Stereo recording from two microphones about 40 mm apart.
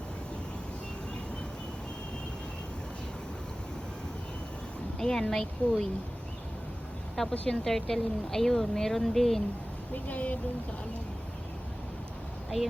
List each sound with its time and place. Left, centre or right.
4.9 s a woman's voice: centre
7.4 s speech: centre
7.7 s a woman's voice: centre
9.9 s speech: left